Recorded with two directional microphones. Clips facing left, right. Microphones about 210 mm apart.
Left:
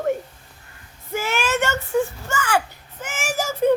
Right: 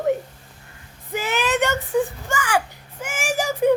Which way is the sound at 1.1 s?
15° right (ahead or behind).